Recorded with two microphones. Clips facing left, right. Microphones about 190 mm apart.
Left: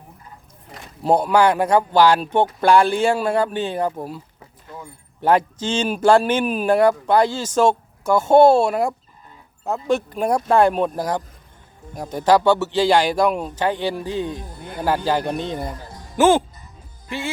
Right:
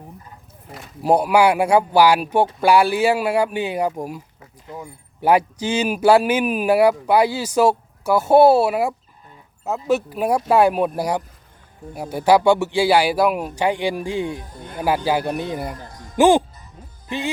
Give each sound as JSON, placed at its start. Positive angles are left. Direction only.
{"t": 0.7, "sound": "speech", "side_deg": -5}